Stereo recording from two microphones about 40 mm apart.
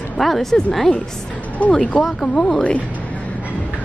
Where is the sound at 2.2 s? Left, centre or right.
Centre.